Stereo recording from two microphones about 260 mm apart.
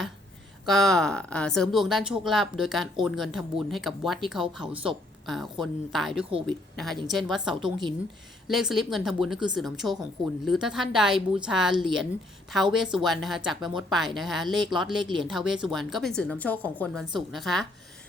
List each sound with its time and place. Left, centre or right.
0.6 s speech: centre
7.6 s a woman's voice: centre
8.4 s speech: centre